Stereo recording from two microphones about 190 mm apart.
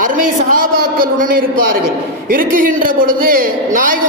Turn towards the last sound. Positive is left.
turn(degrees=-45)  # may be behind; listen again after turning